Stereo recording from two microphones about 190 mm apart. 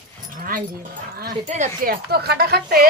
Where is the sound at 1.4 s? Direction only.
40° right (ahead or behind).